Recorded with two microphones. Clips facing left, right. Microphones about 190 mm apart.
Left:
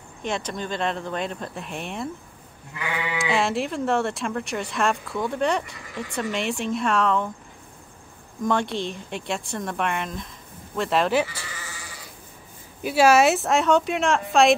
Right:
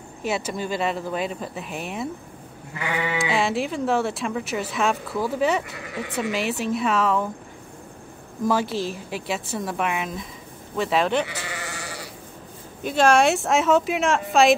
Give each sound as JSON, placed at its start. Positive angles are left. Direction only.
{"t": 0.2, "sound": "speech", "side_deg": -5}
{"t": 3.2, "sound": "speech", "side_deg": 0}
{"t": 8.5, "sound": "speech", "side_deg": -5}
{"t": 11.2, "sound": "sheep", "side_deg": -70}
{"t": 12.8, "sound": "speech", "side_deg": 5}